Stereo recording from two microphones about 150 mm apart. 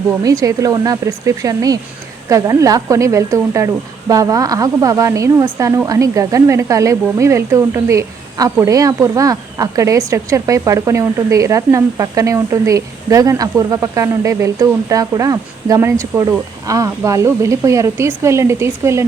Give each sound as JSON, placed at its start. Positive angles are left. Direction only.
{"t": 0.3, "sound": "a woman's voice", "side_deg": -20}